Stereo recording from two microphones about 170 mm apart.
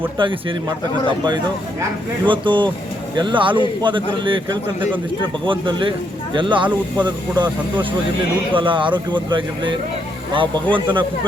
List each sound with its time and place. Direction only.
2.2 s speech: 30° right (ahead or behind)
5.5 s speech: 30° right (ahead or behind)